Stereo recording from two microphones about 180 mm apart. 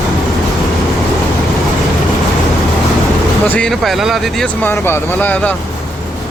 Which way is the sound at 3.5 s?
5° left (ahead or behind).